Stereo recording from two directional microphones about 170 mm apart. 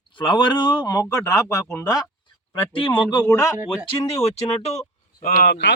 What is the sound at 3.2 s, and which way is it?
Speech, 10° left (ahead or behind).